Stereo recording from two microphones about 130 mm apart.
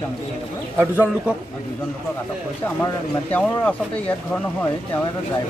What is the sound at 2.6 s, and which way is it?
Speech, 15° left (ahead or behind).